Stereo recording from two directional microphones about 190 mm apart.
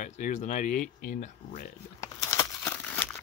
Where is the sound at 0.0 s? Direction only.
40° left (ahead or behind).